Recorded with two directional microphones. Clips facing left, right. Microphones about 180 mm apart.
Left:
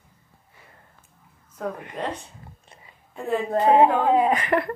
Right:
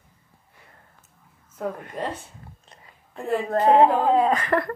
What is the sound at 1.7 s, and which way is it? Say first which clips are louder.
Speech: even; 15° left (ahead or behind).